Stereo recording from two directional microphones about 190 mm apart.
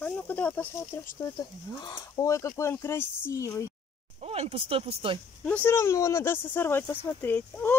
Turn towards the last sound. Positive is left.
turn(degrees=10)  # may be behind; listen again after turning